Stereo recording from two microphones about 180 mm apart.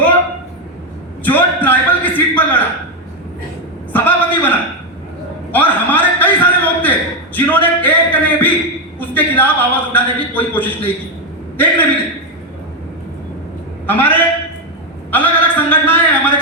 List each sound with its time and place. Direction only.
1.2 s a man's voice: 10° left (ahead or behind)
3.9 s a man's voice: 10° left (ahead or behind)
5.5 s a sound: 10° left (ahead or behind)
7.3 s a man's voice: 10° left (ahead or behind)
13.8 s a man's voice: 10° left (ahead or behind)
15.1 s a sound: 10° left (ahead or behind)